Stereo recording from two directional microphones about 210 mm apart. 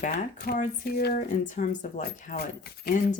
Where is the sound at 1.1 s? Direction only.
35° left (ahead or behind).